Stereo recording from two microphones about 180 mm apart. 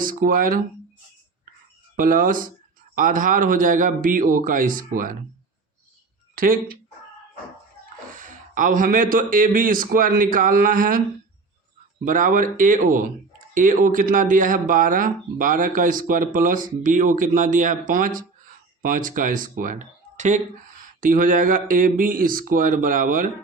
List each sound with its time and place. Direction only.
0.0 s speech: 50° right (ahead or behind)
2.0 s speech: 50° right (ahead or behind)
6.3 s speech: 50° right (ahead or behind)
8.1 s speech: 50° right (ahead or behind)
12.0 s speech: 45° right (ahead or behind)